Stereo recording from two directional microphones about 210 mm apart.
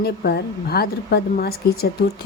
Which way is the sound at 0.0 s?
50° left (ahead or behind).